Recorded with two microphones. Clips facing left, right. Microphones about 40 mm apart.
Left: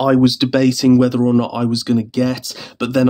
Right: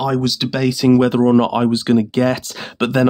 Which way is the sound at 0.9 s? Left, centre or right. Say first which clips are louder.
Right 1 dB; right.